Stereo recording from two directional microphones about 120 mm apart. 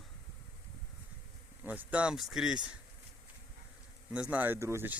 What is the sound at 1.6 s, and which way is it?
Speech, 15° right (ahead or behind).